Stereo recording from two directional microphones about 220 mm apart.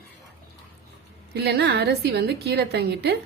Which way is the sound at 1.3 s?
50° right (ahead or behind).